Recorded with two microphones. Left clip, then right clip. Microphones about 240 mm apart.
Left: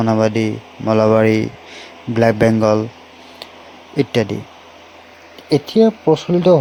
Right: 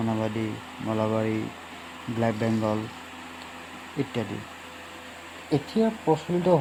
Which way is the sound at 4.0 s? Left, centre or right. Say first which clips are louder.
Left 14 dB; left.